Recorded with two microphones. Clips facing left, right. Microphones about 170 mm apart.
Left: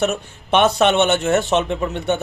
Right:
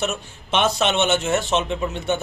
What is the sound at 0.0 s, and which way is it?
A man's voice, 60° left (ahead or behind).